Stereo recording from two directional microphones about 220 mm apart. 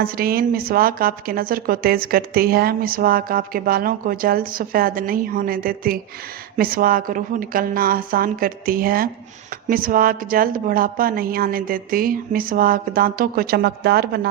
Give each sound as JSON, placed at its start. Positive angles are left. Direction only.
{"t": 0.0, "sound": "a woman's voice", "side_deg": -40}